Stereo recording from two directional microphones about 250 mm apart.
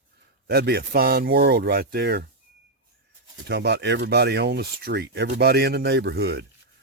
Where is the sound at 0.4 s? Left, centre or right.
Right.